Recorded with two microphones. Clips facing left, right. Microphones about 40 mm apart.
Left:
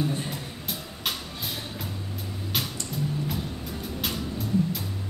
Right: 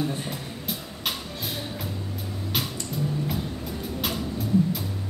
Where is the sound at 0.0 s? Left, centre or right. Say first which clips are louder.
Even; centre.